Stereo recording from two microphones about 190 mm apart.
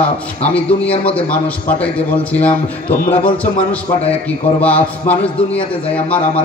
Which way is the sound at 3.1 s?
5° left (ahead or behind).